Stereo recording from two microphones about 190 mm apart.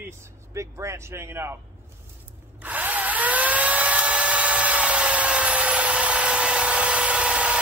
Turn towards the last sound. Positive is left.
turn(degrees=-5)  # may be behind; listen again after turning